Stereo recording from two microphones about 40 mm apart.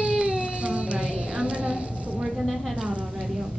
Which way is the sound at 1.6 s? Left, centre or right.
Centre.